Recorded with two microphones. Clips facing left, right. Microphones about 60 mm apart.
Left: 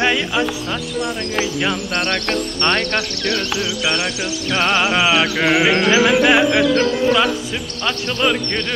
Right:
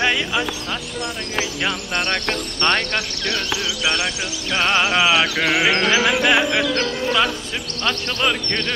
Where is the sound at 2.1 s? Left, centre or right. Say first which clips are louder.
Left 3 dB; centre.